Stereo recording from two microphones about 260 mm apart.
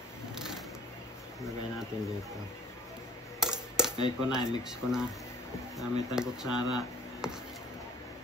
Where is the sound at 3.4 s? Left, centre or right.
Centre.